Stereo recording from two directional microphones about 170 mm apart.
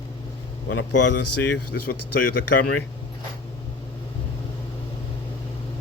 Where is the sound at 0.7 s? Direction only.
90° left.